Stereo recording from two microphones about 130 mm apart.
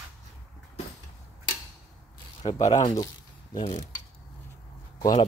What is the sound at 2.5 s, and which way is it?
Speech, 30° left (ahead or behind).